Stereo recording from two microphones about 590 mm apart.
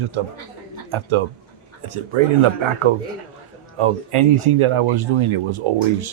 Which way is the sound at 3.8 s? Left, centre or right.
Right.